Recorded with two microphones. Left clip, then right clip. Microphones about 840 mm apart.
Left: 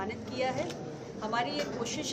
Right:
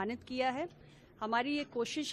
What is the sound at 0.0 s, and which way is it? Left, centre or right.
A woman's voice, right.